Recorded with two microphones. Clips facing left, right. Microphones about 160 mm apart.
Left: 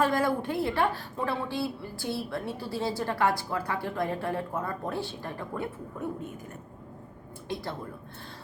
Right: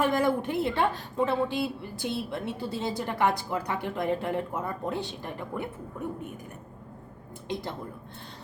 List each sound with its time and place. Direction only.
0.0 s a woman's voice: 20° right (ahead or behind)
7.4 s speech: 20° right (ahead or behind)